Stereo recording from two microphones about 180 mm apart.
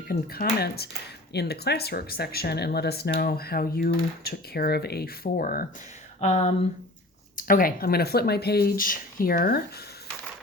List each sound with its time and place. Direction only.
0.1 s speech: 55° left (ahead or behind)
6.1 s speech: 40° left (ahead or behind)
7.3 s speech: 50° left (ahead or behind)